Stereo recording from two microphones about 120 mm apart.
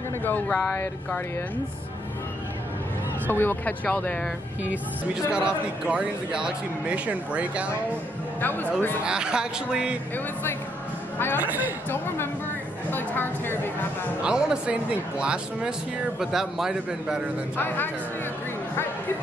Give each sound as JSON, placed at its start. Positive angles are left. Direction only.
{"t": 0.2, "sound": "speech", "side_deg": 15}
{"t": 3.3, "sound": "speech", "side_deg": 20}
{"t": 4.6, "sound": "speech", "side_deg": -5}
{"t": 8.4, "sound": "speech", "side_deg": 15}
{"t": 9.0, "sound": "speech", "side_deg": -5}
{"t": 11.1, "sound": "speech", "side_deg": 15}
{"t": 11.4, "sound": "speech", "side_deg": -15}
{"t": 12.9, "sound": "speech", "side_deg": 15}
{"t": 14.2, "sound": "a man's voice", "side_deg": -5}
{"t": 17.6, "sound": "speech", "side_deg": 15}